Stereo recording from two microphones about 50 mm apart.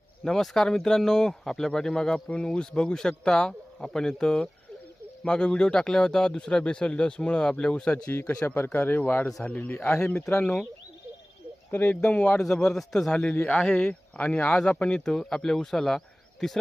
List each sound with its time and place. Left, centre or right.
0.3 s speech: centre
8.1 s speech: left
9.2 s speech: left
11.7 s speech: left
11.9 s speech: centre
13.4 s speech: left
13.7 s speech: centre
14.2 s speech: left; by 16.6 s centre